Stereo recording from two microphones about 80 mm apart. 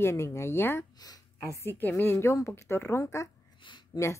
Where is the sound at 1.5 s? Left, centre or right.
Left.